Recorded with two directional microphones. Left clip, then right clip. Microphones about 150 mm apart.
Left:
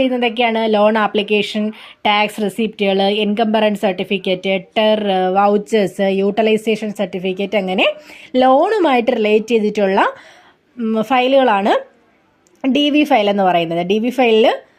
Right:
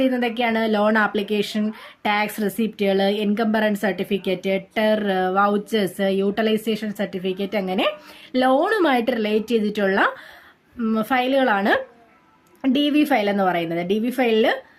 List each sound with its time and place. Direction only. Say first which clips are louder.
0.0 s speech: left 6 dB; 15° left (ahead or behind)